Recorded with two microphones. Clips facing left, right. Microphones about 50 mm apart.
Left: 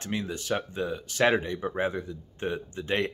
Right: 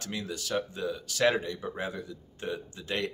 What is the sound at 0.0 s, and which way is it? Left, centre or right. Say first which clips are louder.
Speech: left 4 dB; left.